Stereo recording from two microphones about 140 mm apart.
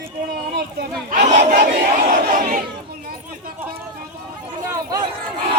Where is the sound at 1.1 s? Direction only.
65° right (ahead or behind).